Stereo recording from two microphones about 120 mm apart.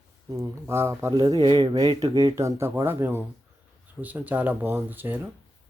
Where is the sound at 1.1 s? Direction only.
35° right (ahead or behind).